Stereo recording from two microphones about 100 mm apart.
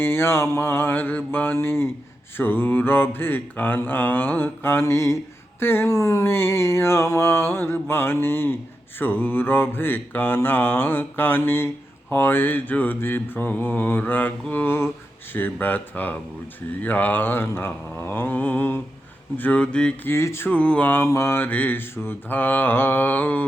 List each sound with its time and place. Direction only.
0.0 s mantra: 25° left (ahead or behind)
15.3 s speech: 20° left (ahead or behind)
16.8 s mantra: 15° left (ahead or behind)
19.4 s speech: 15° left (ahead or behind)
20.1 s mantra: 25° left (ahead or behind)